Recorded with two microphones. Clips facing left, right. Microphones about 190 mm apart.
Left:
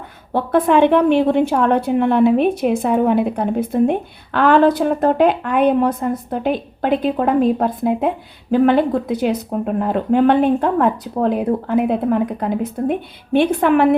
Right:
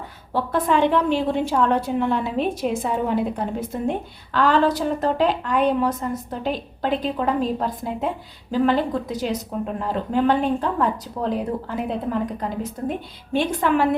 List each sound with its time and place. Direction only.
0.3 s a woman's voice: 60° left (ahead or behind)